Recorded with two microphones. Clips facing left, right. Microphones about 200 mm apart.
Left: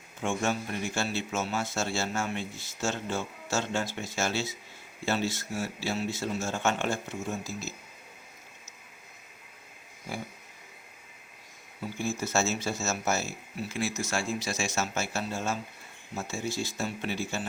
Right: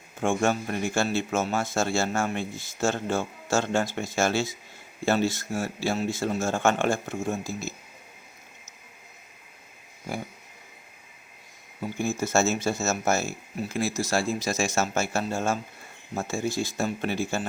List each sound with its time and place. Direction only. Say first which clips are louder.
0.2 s speech: right 5 dB; 50° right (ahead or behind)
11.8 s speech: right 4 dB; 50° right (ahead or behind)